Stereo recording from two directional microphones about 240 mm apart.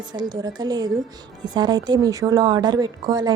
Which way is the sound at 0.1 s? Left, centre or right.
Centre.